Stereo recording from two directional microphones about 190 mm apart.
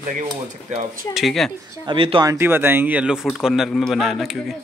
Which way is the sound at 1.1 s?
Centre (ahead or behind).